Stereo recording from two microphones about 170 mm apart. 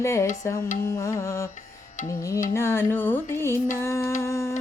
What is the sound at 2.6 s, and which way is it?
Music, 15° left (ahead or behind).